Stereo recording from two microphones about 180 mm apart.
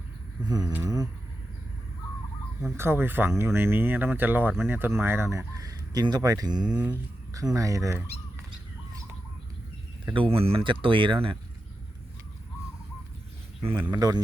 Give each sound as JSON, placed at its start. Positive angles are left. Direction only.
{"t": 0.4, "sound": "speech", "side_deg": -20}
{"t": 2.7, "sound": "speech", "side_deg": -15}
{"t": 6.6, "sound": "speech", "side_deg": -5}
{"t": 7.3, "sound": "speech", "side_deg": -20}
{"t": 10.1, "sound": "speech", "side_deg": -30}
{"t": 13.9, "sound": "speech", "side_deg": -20}